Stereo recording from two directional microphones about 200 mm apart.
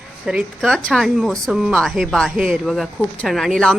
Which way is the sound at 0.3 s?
Centre (ahead or behind).